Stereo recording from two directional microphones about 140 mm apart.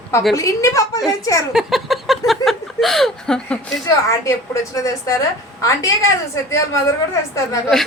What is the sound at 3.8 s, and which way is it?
Speech, 20° left (ahead or behind).